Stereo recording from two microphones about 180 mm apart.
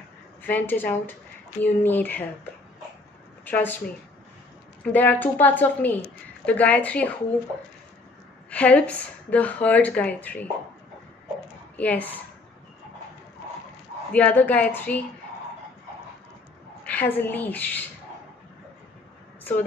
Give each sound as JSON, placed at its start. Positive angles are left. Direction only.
{"t": 0.4, "sound": "speech", "side_deg": 10}
{"t": 3.4, "sound": "speech", "side_deg": 10}
{"t": 8.5, "sound": "speech", "side_deg": 5}
{"t": 11.7, "sound": "speech", "side_deg": 10}
{"t": 14.1, "sound": "speech", "side_deg": 10}
{"t": 16.8, "sound": "speech", "side_deg": 10}